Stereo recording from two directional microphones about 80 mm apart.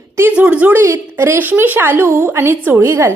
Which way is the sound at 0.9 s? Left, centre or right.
Right.